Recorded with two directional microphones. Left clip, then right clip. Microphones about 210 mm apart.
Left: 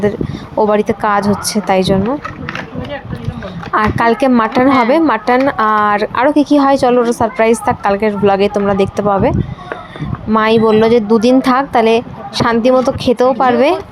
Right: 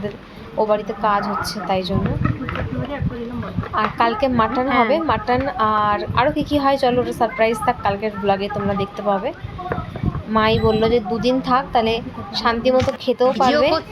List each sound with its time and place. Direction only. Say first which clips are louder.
0.6 s speech: left 6 dB; 35° left (ahead or behind)
3.8 s speech: left 6 dB; 35° left (ahead or behind)
10.3 s speech: left 7 dB; 35° left (ahead or behind)